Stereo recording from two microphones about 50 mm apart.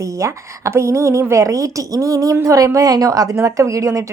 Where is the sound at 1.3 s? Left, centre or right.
Right.